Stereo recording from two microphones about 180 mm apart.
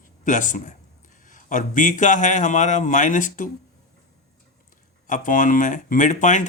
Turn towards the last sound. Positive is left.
turn(degrees=45)  # may be behind; listen again after turning